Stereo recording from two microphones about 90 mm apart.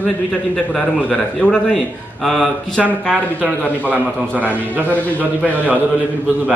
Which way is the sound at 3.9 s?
20° left (ahead or behind).